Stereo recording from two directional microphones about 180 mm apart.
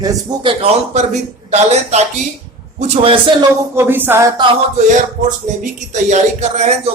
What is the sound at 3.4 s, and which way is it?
Speech, 15° right (ahead or behind).